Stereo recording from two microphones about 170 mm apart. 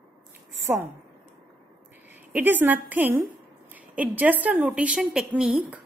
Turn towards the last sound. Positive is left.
turn(degrees=-5)  # may be behind; listen again after turning